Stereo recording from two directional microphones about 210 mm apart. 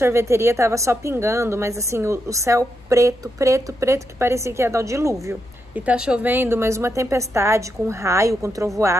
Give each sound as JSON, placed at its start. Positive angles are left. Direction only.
{"t": 0.0, "sound": "a woman's voice", "side_deg": -15}